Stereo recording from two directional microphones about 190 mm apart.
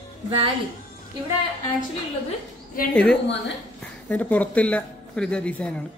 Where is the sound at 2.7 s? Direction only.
45° left (ahead or behind).